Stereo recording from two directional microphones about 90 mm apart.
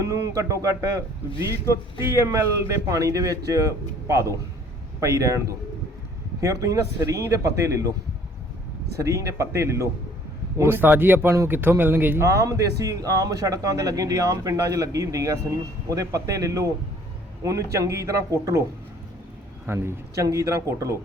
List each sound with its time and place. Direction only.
0.0 s a man's voice: 35° right (ahead or behind)
2.2 s a man's voice: 30° right (ahead or behind)
6.4 s a man's voice: 35° right (ahead or behind)
9.0 s a man's voice: 35° right (ahead or behind)
12.2 s a man's voice: 35° right (ahead or behind)
19.6 s a man's voice: 25° right (ahead or behind)